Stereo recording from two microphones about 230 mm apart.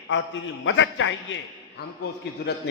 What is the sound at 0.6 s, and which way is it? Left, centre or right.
Speech, left.